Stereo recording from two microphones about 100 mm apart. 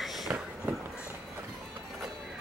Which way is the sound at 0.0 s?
Centre (ahead or behind).